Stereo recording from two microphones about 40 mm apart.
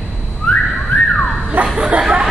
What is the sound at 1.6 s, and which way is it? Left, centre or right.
Speech, right.